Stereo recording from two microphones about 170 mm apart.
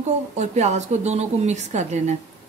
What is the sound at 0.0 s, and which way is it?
Speech, 40° right (ahead or behind).